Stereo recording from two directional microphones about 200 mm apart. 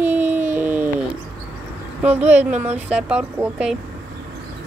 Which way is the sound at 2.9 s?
5° right (ahead or behind).